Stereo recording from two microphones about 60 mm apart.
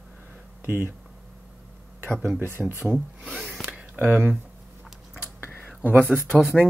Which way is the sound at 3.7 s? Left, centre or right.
Right.